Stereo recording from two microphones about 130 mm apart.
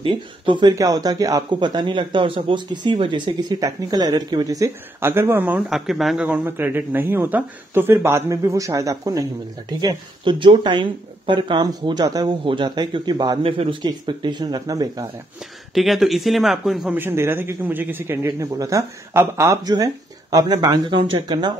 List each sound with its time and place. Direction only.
0.0 s speech: 40° right (ahead or behind); by 5.6 s 15° right (ahead or behind)
5.7 s speech: centre (ahead or behind); by 13.4 s 35° right (ahead or behind)
13.4 s speech: 45° right (ahead or behind); by 15.0 s 30° right (ahead or behind)
15.7 s speech: centre (ahead or behind)
16.9 s speech: 15° right (ahead or behind)
20.9 s speech: 45° right (ahead or behind)
21.3 s speech: 35° right (ahead or behind)